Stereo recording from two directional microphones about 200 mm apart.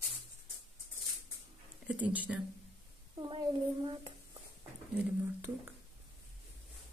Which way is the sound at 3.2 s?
25° right (ahead or behind).